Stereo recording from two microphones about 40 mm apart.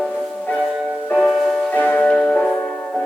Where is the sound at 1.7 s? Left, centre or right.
Left.